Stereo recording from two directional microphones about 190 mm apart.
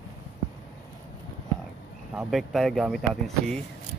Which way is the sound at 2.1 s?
5° right (ahead or behind).